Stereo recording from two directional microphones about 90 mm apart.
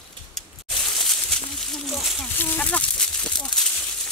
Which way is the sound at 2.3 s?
20° left (ahead or behind).